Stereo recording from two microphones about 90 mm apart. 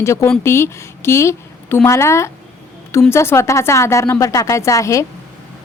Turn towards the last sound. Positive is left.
turn(degrees=35)  # may be behind; listen again after turning